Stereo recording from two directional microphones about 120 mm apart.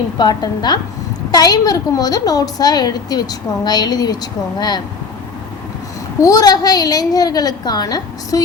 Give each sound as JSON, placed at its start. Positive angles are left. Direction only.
{"t": 0.2, "sound": "a woman's voice", "side_deg": 35}
{"t": 6.2, "sound": "a woman's voice", "side_deg": 30}